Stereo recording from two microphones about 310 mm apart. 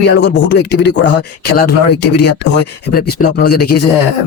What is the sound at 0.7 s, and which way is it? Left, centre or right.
Speech, left.